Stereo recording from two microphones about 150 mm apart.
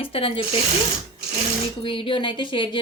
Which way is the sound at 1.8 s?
35° left (ahead or behind).